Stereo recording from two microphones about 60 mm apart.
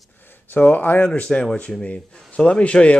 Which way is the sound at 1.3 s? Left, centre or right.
Centre.